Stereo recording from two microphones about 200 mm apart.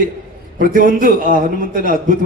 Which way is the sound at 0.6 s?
45° right (ahead or behind).